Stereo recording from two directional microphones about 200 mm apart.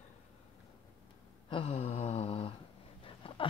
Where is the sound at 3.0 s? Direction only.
25° left (ahead or behind).